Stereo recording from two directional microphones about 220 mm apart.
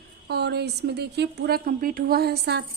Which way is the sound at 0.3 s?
50° right (ahead or behind).